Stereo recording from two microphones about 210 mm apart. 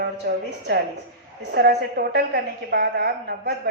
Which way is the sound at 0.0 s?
50° right (ahead or behind).